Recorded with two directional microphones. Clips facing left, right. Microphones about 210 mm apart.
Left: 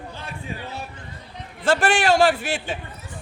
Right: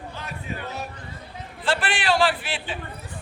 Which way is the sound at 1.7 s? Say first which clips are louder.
Left 5 dB; 45° left (ahead or behind).